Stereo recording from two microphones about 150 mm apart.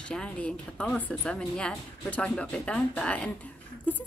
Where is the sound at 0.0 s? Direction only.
5° left (ahead or behind).